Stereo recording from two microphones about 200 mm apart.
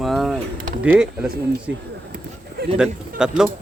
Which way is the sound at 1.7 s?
65° right (ahead or behind).